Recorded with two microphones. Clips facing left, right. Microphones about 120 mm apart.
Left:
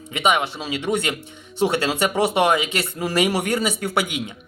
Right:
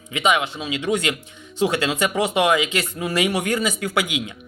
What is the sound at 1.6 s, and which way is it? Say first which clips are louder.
Speech: left 1 dB; 30° left (ahead or behind).